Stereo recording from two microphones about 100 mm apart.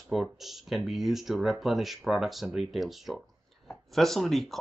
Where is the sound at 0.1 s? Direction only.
Centre (ahead or behind).